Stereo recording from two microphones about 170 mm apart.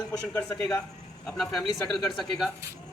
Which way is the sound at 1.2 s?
Centre (ahead or behind).